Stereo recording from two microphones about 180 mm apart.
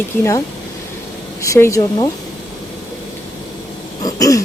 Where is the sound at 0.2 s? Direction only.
15° left (ahead or behind).